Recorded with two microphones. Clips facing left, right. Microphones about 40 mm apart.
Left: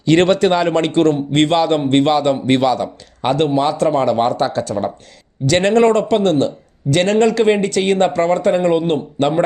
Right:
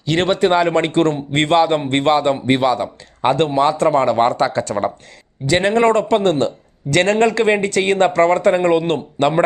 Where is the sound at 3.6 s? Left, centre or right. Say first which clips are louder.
Right 1 dB; right.